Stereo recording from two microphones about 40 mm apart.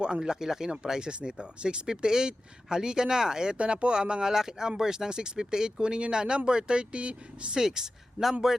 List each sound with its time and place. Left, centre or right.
0.0 s speech: centre
7.5 s speech: centre